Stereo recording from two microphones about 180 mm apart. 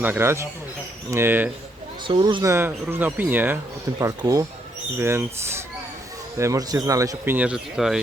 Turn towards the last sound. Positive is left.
turn(degrees=-5)  # may be behind; listen again after turning